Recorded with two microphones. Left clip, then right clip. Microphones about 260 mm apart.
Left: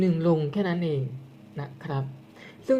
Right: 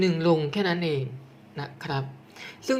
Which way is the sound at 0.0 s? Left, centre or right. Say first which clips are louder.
Right 2 dB; centre.